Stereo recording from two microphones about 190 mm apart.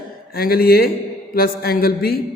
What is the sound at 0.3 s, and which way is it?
Speech, 50° left (ahead or behind).